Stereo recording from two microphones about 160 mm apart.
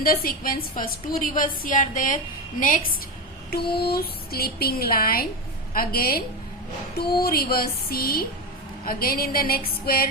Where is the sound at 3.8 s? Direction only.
75° left (ahead or behind).